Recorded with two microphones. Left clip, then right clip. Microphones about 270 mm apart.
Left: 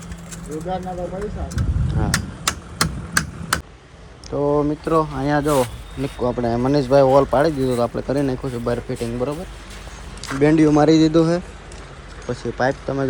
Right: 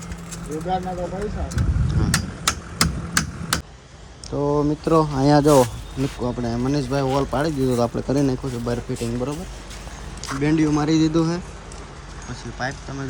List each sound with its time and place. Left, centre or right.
0.5 s speech: centre
1.2 s vehicle: centre
4.3 s speech: centre
6.3 s speech: centre